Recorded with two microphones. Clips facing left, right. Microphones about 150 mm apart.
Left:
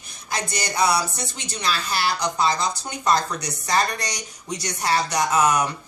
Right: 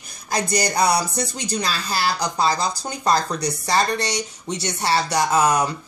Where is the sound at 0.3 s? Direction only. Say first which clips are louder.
Right 6 dB; 40° right (ahead or behind).